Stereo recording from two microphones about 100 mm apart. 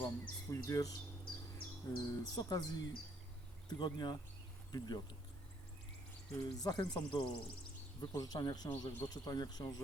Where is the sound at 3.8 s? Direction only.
45° left (ahead or behind).